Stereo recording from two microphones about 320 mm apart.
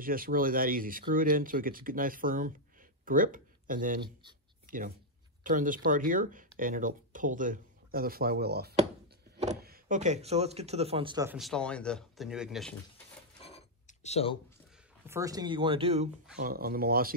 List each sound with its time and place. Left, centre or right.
0.0 s speech: right
11.3 s speech: centre
13.4 s a sound: centre
15.0 s speech: centre; by 17.1 s right